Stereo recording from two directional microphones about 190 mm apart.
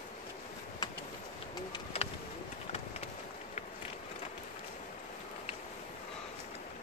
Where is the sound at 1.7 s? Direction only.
30° left (ahead or behind).